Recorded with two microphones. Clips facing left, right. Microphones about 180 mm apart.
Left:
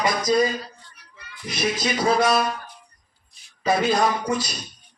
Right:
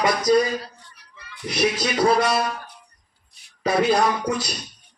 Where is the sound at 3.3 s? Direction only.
65° right (ahead or behind).